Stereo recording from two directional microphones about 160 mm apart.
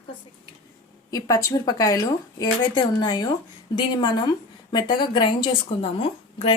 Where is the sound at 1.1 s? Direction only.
20° left (ahead or behind).